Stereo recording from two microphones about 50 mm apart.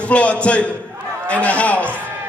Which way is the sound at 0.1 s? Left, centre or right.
Left.